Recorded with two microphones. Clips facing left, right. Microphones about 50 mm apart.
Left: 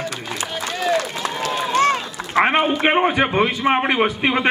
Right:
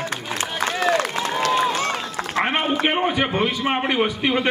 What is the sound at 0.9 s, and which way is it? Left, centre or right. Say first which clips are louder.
Run: even; right.